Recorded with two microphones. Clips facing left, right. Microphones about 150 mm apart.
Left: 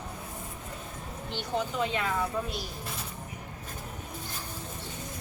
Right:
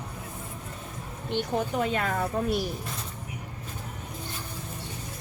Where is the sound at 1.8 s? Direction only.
50° right (ahead or behind).